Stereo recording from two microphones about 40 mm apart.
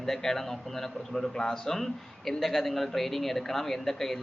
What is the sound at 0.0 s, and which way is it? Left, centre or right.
Speech, centre.